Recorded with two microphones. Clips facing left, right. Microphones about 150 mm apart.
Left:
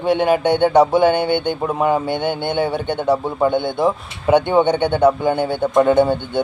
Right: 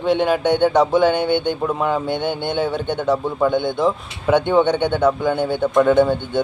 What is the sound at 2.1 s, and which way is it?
Speech, 55° left (ahead or behind).